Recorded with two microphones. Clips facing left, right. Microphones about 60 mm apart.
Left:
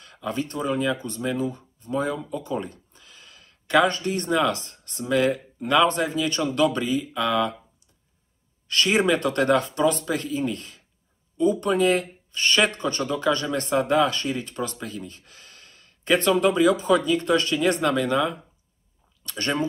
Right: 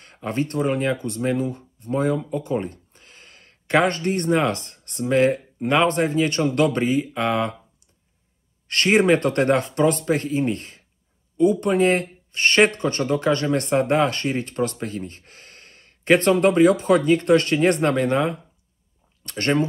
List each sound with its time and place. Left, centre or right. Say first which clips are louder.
0.0 s speech: right 3 dB; right
8.6 s speech: right 4 dB; right